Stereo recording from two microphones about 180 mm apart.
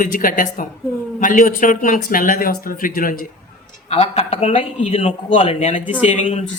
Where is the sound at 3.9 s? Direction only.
35° left (ahead or behind).